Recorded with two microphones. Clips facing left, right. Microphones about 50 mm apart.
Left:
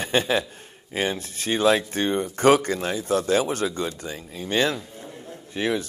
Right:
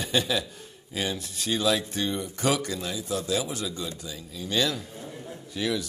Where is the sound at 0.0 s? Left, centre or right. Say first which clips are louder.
Left 4 dB; left.